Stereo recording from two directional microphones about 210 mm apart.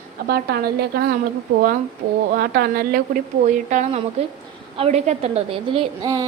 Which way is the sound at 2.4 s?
45° right (ahead or behind).